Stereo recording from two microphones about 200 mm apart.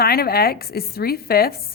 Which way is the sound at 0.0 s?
50° left (ahead or behind).